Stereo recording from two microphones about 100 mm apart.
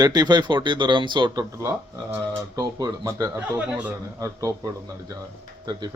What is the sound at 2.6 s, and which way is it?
Speech, 40° right (ahead or behind).